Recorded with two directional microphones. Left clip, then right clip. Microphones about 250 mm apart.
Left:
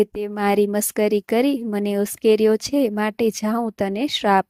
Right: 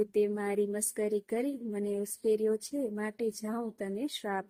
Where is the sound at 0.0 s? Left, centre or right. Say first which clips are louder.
Left 9 dB; left.